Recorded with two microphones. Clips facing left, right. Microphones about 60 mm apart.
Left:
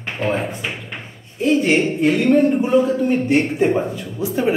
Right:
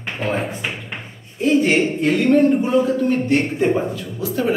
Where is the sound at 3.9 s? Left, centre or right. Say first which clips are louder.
Left 1 dB; left.